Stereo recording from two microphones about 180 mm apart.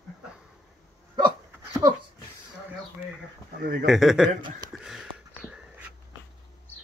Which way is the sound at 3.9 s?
Centre (ahead or behind).